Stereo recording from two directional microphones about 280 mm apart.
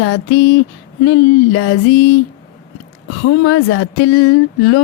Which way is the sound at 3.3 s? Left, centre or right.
Left.